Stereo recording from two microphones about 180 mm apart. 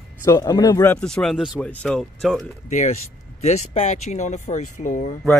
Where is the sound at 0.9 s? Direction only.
5° left (ahead or behind).